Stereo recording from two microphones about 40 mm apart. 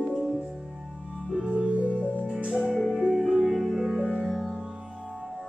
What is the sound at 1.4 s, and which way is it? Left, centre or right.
Keyboard, right.